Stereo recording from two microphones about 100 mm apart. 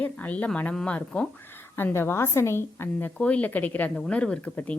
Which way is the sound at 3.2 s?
15° left (ahead or behind).